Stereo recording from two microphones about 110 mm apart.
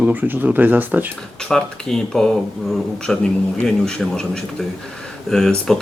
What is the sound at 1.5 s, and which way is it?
Speech, 5° left (ahead or behind).